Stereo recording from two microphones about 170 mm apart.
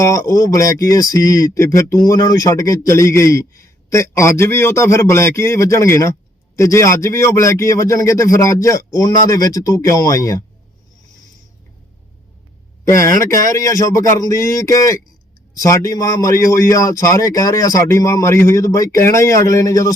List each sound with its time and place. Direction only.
0.0 s speech: 20° left (ahead or behind)
12.8 s a man's voice: 15° left (ahead or behind)